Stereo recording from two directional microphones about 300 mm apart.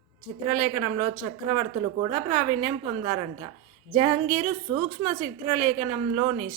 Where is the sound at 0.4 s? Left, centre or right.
Right.